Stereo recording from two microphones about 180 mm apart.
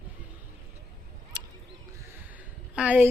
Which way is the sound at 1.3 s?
25° right (ahead or behind).